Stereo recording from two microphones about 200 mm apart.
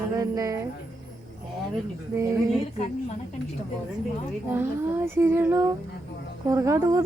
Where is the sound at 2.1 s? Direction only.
15° right (ahead or behind).